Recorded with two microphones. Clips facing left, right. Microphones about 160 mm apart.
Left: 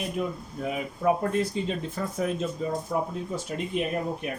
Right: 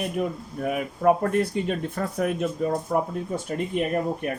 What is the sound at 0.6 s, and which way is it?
Speech, 60° right (ahead or behind).